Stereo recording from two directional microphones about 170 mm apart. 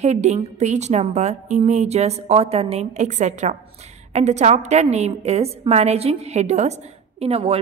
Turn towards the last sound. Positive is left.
turn(degrees=-35)  # may be behind; listen again after turning